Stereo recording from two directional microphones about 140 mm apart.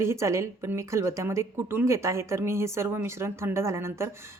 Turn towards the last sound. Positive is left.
turn(degrees=-20)  # may be behind; listen again after turning